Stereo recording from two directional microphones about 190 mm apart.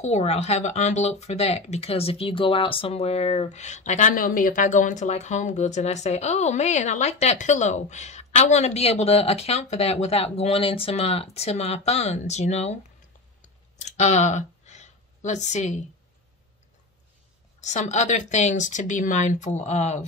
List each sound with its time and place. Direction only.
0.0 s speech: 35° left (ahead or behind)
13.4 s clicking: 40° left (ahead or behind)
17.6 s speech: 40° left (ahead or behind)